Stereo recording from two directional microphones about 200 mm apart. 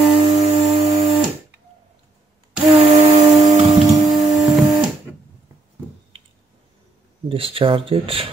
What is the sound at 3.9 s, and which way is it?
Printer, 20° right (ahead or behind).